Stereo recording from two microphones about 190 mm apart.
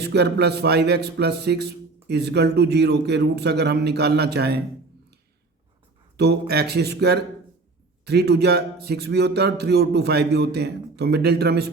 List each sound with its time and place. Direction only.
0.0 s a man's voice: 60° right (ahead or behind)
6.5 s a man's voice: 60° right (ahead or behind)